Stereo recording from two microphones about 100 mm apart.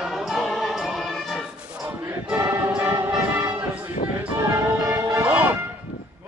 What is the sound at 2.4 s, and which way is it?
Choir, 25° right (ahead or behind).